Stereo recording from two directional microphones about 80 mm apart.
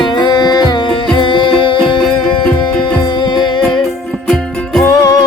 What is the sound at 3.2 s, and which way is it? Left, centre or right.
Music, left.